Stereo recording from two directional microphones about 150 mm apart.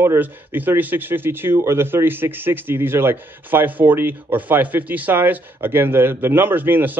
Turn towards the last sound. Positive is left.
turn(degrees=-15)  # may be behind; listen again after turning